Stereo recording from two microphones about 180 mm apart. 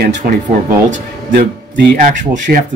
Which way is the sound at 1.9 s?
45° right (ahead or behind).